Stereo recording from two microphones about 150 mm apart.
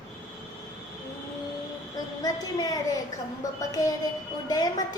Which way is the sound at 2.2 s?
25° left (ahead or behind).